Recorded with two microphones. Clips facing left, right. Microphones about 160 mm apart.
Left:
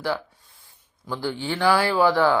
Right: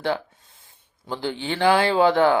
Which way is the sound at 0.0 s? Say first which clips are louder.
Right 2 dB; 25° right (ahead or behind).